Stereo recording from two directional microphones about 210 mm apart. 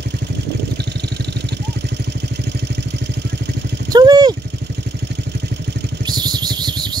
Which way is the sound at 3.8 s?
20° right (ahead or behind).